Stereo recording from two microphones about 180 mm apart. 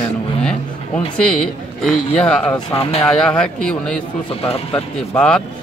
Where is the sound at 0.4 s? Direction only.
5° left (ahead or behind).